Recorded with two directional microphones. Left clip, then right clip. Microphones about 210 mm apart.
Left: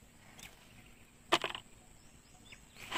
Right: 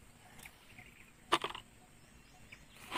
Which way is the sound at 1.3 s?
25° left (ahead or behind).